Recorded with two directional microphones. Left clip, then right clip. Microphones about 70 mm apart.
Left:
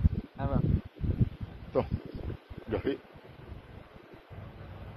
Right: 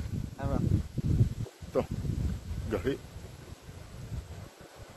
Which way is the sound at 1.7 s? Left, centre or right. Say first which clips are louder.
Left 1 dB; centre.